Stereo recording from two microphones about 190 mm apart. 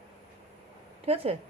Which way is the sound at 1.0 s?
30° right (ahead or behind).